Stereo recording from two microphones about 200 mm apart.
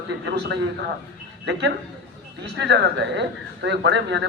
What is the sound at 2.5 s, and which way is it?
A man's voice, 60° right (ahead or behind).